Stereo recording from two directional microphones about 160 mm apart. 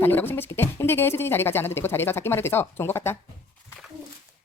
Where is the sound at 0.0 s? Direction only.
10° left (ahead or behind).